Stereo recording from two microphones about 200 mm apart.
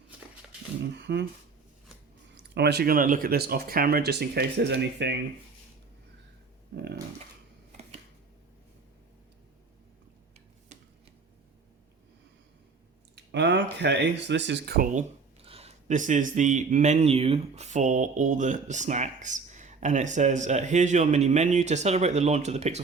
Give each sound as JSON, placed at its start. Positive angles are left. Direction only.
{"t": 0.9, "sound": "speech", "side_deg": -55}
{"t": 2.3, "sound": "speech", "side_deg": -55}
{"t": 10.7, "sound": "a sound", "side_deg": -35}
{"t": 13.1, "sound": "speech", "side_deg": -60}
{"t": 15.4, "sound": "speech", "side_deg": -30}